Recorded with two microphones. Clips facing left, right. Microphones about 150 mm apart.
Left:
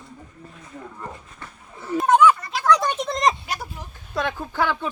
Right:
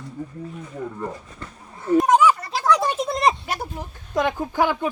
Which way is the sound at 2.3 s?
35° right (ahead or behind).